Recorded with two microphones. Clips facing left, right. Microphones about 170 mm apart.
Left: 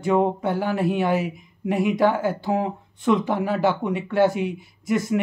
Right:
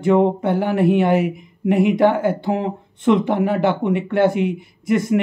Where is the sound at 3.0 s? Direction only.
20° right (ahead or behind).